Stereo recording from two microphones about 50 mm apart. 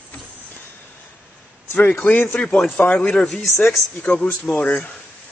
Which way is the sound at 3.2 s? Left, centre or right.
Centre.